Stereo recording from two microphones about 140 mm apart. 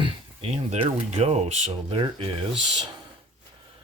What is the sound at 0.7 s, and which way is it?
Speech, 50° right (ahead or behind).